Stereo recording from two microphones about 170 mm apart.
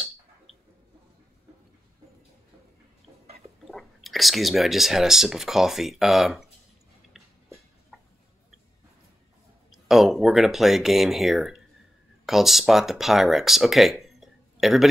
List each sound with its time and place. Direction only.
3.7 s speech: centre (ahead or behind)
7.9 s a sound: 5° right (ahead or behind)
9.7 s speech: centre (ahead or behind)